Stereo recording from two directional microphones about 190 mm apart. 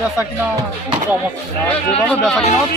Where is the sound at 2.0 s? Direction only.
5° left (ahead or behind).